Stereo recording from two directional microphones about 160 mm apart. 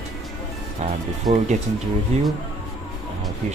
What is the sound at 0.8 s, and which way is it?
Speech, 45° right (ahead or behind).